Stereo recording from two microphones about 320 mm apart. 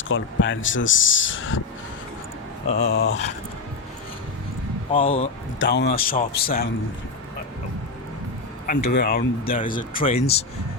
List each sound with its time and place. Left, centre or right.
0.1 s speech: left
2.8 s speech: left
4.9 s speech: centre
5.5 s speech: left
8.6 s speech: left